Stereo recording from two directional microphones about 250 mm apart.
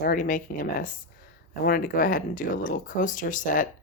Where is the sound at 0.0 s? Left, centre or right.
Left.